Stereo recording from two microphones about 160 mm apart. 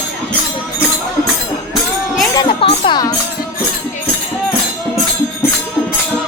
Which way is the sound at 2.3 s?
30° left (ahead or behind).